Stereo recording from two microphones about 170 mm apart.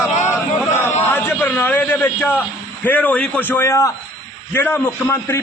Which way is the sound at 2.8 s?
10° left (ahead or behind).